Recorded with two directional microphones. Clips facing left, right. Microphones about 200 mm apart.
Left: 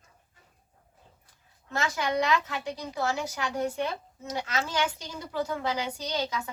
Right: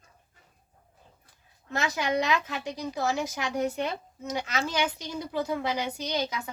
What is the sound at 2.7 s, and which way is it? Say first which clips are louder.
A woman's voice: right 3 dB; 15° right (ahead or behind).